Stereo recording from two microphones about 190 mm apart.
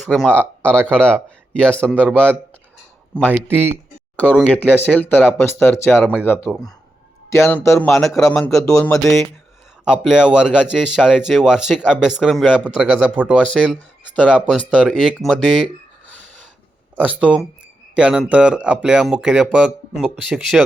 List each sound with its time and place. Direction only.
0.0 s speech: 5° left (ahead or behind)
3.5 s speech: 10° right (ahead or behind)
4.2 s speech: 10° left (ahead or behind)
6.0 s speech: centre (ahead or behind)
6.2 s speech: 10° left (ahead or behind); by 13.3 s 5° right (ahead or behind)
13.5 s speech: 5° left (ahead or behind)
17.0 s speech: 5° right (ahead or behind)